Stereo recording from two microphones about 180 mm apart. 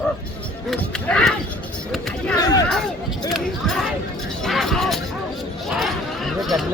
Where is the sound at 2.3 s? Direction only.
20° left (ahead or behind).